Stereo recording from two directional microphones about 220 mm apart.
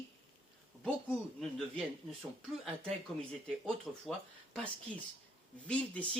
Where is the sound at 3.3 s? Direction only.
Centre (ahead or behind).